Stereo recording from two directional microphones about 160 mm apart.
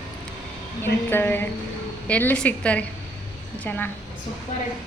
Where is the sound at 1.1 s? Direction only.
15° left (ahead or behind).